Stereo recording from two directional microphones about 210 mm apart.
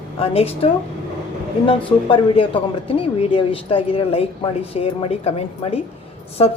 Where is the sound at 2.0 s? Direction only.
25° left (ahead or behind).